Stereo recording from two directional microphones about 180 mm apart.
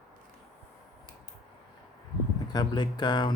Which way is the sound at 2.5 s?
25° left (ahead or behind).